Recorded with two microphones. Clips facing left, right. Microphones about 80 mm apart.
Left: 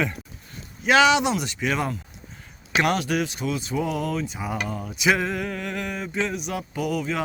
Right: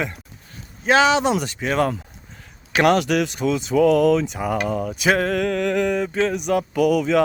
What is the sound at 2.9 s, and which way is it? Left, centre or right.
Speech, right.